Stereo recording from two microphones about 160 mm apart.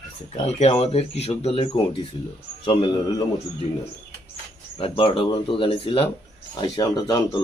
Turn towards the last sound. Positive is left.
turn(degrees=25)  # may be behind; listen again after turning